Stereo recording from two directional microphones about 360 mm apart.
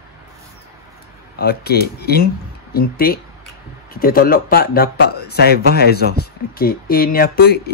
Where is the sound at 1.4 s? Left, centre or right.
Left.